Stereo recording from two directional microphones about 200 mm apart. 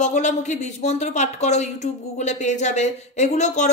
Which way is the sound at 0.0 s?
35° left (ahead or behind).